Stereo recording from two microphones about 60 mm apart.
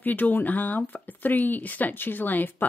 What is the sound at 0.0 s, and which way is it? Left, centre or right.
Speech, left.